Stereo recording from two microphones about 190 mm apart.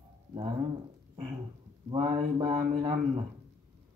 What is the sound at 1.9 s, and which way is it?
Speech, 25° right (ahead or behind).